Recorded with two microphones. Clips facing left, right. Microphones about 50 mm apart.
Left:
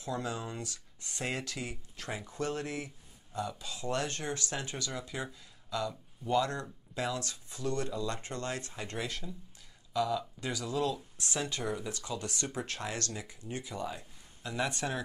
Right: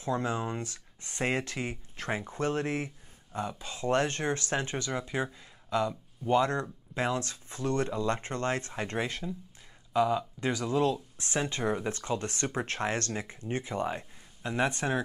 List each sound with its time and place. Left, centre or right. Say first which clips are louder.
0.0 s speech: right 6 dB; right